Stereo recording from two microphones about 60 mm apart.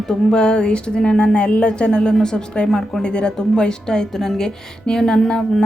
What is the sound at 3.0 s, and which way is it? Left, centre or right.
Speech, centre.